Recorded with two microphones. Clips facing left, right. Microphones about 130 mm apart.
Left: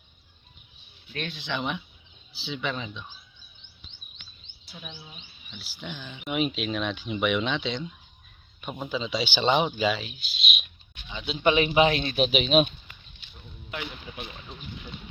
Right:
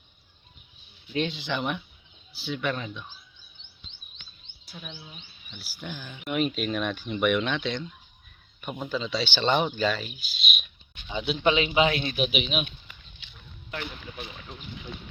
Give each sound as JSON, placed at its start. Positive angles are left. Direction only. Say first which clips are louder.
{"t": 1.1, "sound": "speech", "louder": "right 7 dB", "side_deg": -20}
{"t": 1.4, "sound": "speech", "louder": "right 1 dB", "side_deg": -5}
{"t": 4.7, "sound": "speech", "louder": "right 1 dB", "side_deg": 5}
{"t": 11.7, "sound": "a man's voice", "louder": "left 2 dB", "side_deg": 25}
{"t": 13.7, "sound": "speech", "louder": "even", "side_deg": 5}